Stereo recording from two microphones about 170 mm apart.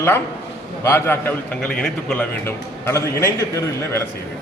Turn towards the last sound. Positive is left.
turn(degrees=15)  # may be behind; listen again after turning